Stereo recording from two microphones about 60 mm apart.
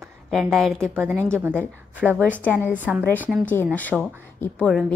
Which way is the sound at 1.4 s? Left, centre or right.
Right.